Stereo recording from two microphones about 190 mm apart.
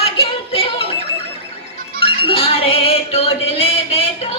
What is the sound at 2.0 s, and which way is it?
Music, 30° left (ahead or behind).